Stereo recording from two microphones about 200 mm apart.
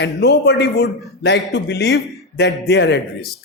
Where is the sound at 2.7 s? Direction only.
55° left (ahead or behind).